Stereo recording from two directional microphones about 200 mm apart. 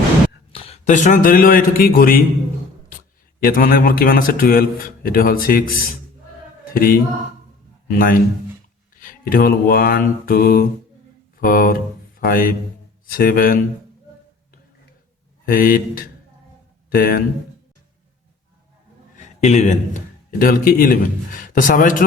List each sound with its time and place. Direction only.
0.5 s a man's voice: 30° left (ahead or behind); by 2.2 s 45° left (ahead or behind)
3.4 s a man's voice: 45° left (ahead or behind)
15.4 s a man's voice: 45° left (ahead or behind)
19.1 s a man's voice: 35° left (ahead or behind)